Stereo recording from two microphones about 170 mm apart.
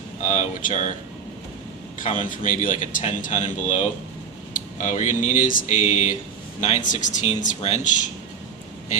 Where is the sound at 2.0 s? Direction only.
50° left (ahead or behind).